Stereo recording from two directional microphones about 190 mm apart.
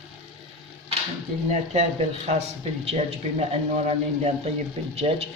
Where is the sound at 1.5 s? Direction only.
35° right (ahead or behind).